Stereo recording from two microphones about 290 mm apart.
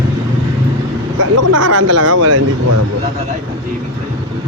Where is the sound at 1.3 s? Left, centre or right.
Right.